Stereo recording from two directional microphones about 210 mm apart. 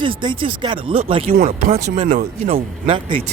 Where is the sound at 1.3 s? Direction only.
45° right (ahead or behind).